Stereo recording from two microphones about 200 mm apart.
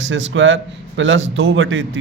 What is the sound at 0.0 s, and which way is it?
A man's voice, 70° right (ahead or behind).